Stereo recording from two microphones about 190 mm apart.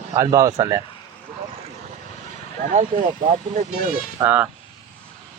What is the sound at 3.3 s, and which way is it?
Speech, 35° right (ahead or behind).